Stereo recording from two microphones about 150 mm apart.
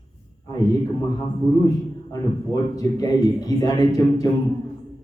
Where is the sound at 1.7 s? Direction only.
25° left (ahead or behind).